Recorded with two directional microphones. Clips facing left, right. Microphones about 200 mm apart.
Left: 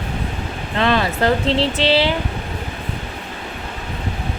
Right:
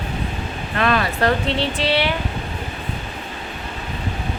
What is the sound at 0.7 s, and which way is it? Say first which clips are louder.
Speech: left 2 dB; 25° left (ahead or behind).